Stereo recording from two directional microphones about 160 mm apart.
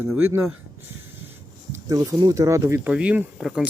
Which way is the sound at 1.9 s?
25° right (ahead or behind).